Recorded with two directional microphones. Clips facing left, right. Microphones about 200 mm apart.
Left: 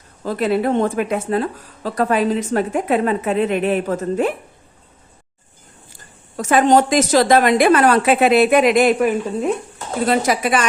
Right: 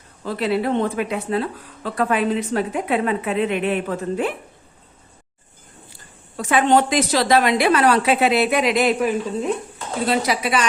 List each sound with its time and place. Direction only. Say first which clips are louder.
0.3 s speech: left 3 dB; 45° left (ahead or behind)
5.9 s a woman's voice: left 1 dB; 45° left (ahead or behind)